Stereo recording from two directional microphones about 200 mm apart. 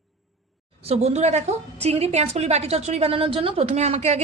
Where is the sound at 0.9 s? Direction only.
35° right (ahead or behind).